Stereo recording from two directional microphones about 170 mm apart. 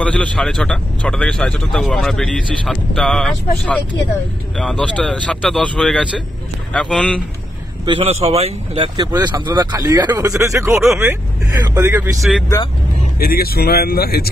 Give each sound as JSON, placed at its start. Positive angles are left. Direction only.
{"t": 0.0, "sound": "speech", "side_deg": 5}
{"t": 7.8, "sound": "speech", "side_deg": -35}
{"t": 12.2, "sound": "speech", "side_deg": -5}
{"t": 13.2, "sound": "speech", "side_deg": 60}